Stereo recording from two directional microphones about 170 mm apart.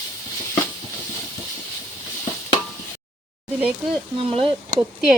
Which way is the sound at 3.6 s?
10° right (ahead or behind).